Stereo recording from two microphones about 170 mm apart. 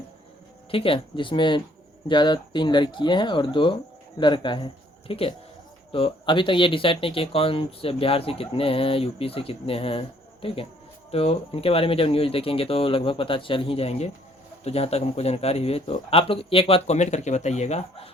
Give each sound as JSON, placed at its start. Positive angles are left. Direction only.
{"t": 0.7, "sound": "speech", "side_deg": 30}